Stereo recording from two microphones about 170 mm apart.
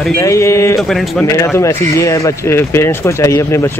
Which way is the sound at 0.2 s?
15° left (ahead or behind).